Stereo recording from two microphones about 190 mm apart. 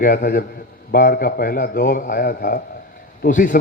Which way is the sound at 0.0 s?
50° left (ahead or behind).